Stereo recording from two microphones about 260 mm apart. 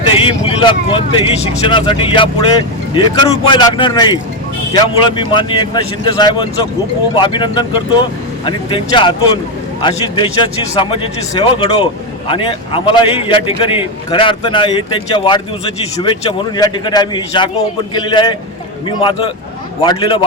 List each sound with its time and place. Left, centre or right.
0.1 s a man's voice: left
16.6 s a man's voice: centre